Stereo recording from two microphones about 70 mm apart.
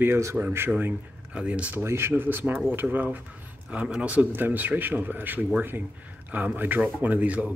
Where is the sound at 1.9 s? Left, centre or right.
Right.